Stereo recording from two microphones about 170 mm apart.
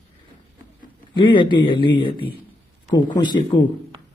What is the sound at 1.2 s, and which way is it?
Speech, 30° left (ahead or behind).